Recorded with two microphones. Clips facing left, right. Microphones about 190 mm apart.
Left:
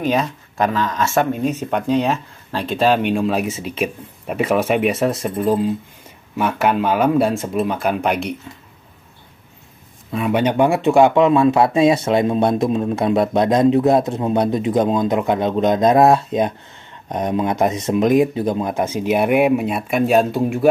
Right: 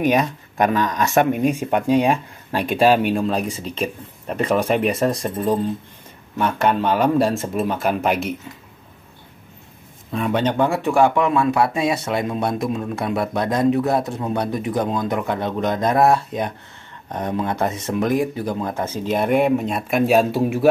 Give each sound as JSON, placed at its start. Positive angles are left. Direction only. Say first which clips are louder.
{"t": 0.0, "sound": "speech", "louder": "right 1 dB", "side_deg": -15}
{"t": 10.1, "sound": "speech", "louder": "left 3 dB", "side_deg": 10}